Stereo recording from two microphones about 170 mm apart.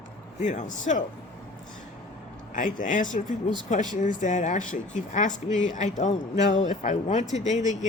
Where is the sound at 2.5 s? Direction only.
50° left (ahead or behind).